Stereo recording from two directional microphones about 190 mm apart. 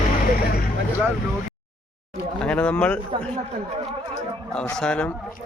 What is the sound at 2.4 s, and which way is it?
Speech, 5° left (ahead or behind).